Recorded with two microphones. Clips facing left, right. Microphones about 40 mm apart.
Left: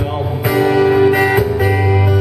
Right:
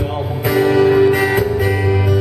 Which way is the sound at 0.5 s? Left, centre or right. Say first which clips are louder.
Even; centre.